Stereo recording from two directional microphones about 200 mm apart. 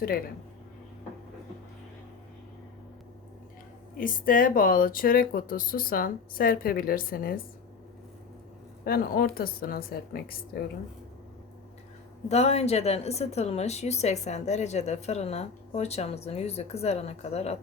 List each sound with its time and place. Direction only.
3.9 s speech: 45° left (ahead or behind)
8.8 s speech: 50° left (ahead or behind)
12.3 s a woman's voice: 30° left (ahead or behind)